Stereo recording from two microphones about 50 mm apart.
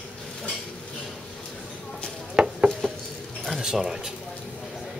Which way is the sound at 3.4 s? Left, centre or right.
Centre.